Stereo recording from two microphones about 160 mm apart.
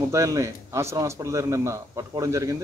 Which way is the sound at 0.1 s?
20° right (ahead or behind).